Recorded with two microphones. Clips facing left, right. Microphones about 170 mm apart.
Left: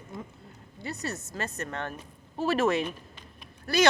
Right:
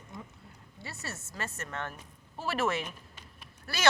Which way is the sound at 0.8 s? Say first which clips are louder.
Left 8 dB; 20° left (ahead or behind).